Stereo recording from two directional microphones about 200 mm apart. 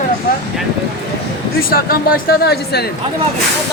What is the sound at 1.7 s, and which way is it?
Speech, 45° left (ahead or behind).